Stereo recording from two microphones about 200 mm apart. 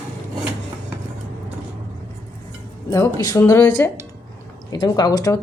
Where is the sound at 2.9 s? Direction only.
15° left (ahead or behind).